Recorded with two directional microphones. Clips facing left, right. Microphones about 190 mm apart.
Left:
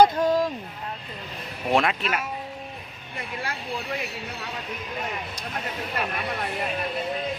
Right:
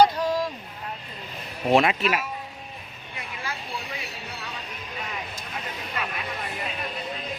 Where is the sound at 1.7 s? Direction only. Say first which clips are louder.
Right 3 dB; 5° right (ahead or behind).